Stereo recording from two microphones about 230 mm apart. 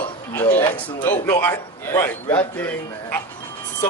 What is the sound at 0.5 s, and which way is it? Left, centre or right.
Speech, left.